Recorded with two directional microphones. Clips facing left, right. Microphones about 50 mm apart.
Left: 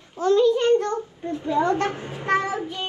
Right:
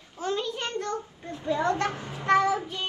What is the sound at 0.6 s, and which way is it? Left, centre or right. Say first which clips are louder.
A child's voice: left 11 dB; left.